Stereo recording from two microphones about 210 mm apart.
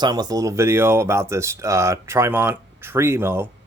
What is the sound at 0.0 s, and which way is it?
A man's voice, 20° right (ahead or behind).